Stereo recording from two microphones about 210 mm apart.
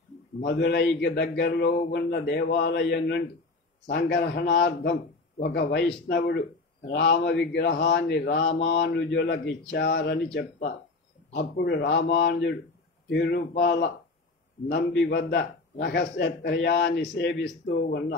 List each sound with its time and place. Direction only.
0.5 s a man's voice: 50° left (ahead or behind)